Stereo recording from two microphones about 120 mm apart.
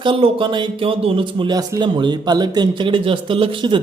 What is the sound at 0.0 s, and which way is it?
Speech, 45° right (ahead or behind).